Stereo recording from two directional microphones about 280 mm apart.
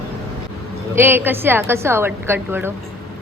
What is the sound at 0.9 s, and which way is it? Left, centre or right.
A woman's voice, centre.